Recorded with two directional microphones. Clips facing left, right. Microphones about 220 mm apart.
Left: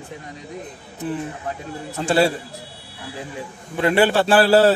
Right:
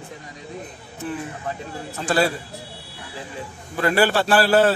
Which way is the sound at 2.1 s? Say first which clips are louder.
Left 3 dB; 25° left (ahead or behind).